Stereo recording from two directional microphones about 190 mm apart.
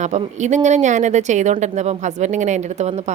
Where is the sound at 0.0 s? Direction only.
40° right (ahead or behind).